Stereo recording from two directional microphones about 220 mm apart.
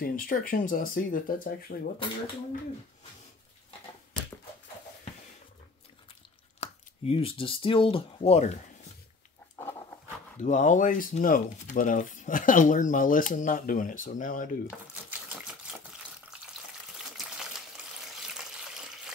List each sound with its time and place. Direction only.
0.0 s speech: 40° left (ahead or behind)
6.6 s speech: 25° left (ahead or behind)
9.6 s dog: 10° left (ahead or behind)
10.4 s speech: 35° left (ahead or behind)
15.0 s typewriter: 5° right (ahead or behind)
18.0 s water: 5° right (ahead or behind)